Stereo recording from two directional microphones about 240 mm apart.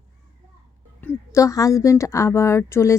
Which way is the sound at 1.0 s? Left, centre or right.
Centre.